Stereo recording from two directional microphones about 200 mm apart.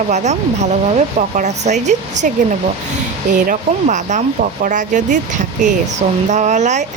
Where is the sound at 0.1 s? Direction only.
35° right (ahead or behind).